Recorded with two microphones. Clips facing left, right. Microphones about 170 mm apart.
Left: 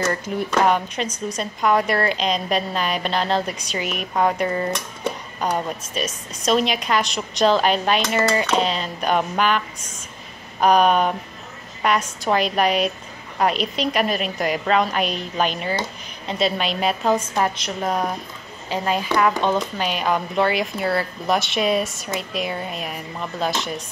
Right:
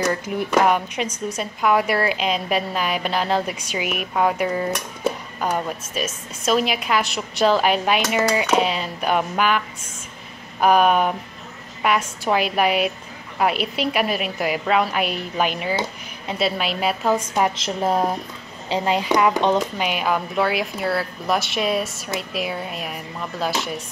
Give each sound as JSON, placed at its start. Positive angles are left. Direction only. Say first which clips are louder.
{"t": 0.0, "sound": "a woman's voice", "louder": "right 1 dB", "side_deg": -10}
{"t": 10.6, "sound": "a woman's voice", "louder": "even", "side_deg": -10}
{"t": 17.6, "sound": "speech", "louder": "right 3 dB", "side_deg": -25}
{"t": 19.9, "sound": "a woman's voice", "louder": "even", "side_deg": -5}